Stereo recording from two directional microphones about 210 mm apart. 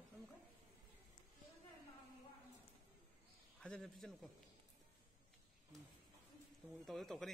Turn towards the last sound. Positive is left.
turn(degrees=0)  # may be behind; listen again after turning